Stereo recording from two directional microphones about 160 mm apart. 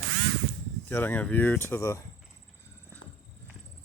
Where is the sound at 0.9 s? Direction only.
10° left (ahead or behind).